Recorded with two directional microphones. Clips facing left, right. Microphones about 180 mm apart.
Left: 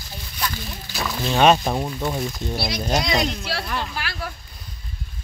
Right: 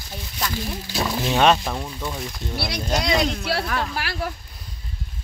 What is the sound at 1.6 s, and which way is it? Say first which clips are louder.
Speech: left 5 dB; 30° left (ahead or behind).